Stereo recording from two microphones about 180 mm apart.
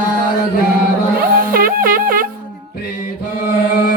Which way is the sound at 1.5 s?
55° right (ahead or behind).